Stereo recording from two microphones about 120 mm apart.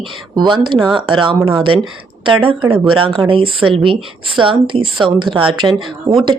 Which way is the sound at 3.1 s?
45° right (ahead or behind).